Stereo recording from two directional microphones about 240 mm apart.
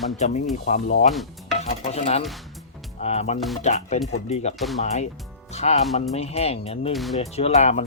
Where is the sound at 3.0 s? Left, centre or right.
Left.